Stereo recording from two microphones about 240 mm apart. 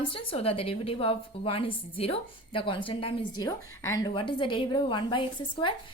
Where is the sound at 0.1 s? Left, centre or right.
Left.